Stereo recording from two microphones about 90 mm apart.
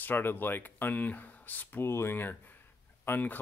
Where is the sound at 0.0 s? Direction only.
20° left (ahead or behind).